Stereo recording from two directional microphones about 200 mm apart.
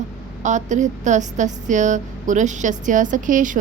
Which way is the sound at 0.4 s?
35° right (ahead or behind).